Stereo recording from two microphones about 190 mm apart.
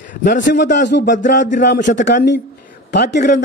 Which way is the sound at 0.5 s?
65° left (ahead or behind).